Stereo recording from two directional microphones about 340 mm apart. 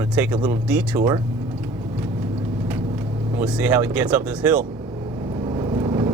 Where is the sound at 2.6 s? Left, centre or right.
Centre.